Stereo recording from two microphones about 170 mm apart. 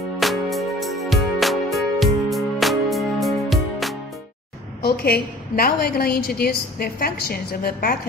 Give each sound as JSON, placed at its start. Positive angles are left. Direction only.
{"t": 0.2, "sound": "music", "side_deg": 0}
{"t": 4.8, "sound": "a woman's voice", "side_deg": 65}